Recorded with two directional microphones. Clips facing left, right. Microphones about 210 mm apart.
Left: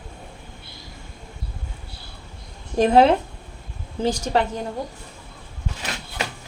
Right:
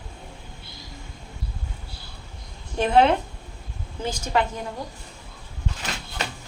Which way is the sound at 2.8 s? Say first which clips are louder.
Left 3 dB; 40° left (ahead or behind).